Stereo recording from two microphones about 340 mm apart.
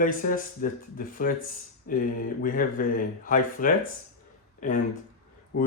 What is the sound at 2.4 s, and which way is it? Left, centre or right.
Speech, left.